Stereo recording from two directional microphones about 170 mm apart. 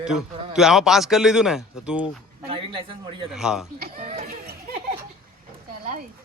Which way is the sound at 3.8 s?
60° right (ahead or behind).